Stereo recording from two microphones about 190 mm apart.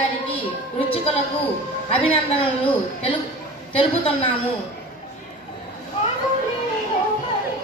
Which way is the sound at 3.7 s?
30° left (ahead or behind).